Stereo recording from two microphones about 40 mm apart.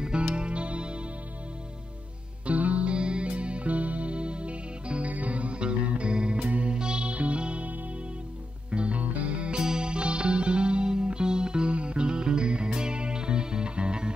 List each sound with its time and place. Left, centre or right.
0.0 s music: right
2.4 s music: right
6.7 s music: right